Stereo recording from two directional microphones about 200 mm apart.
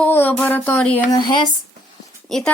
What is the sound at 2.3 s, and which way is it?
Speech, centre (ahead or behind).